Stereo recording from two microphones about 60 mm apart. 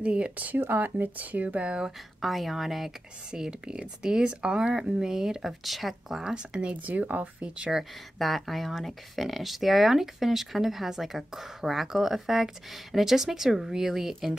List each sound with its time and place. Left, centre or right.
0.0 s speech: right
2.2 s speech: centre
6.3 s speech: centre
7.7 s speech: centre